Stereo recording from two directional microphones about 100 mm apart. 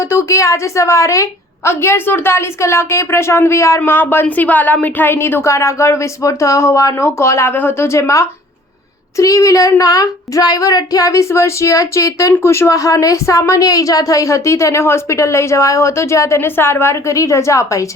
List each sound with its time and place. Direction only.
0.0 s a woman's voice: 30° left (ahead or behind)